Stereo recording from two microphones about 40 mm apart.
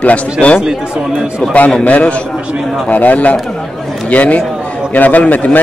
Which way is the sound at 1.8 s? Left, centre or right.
Left.